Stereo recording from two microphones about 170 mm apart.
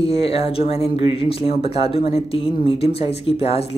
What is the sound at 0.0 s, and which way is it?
Speech, 35° left (ahead or behind).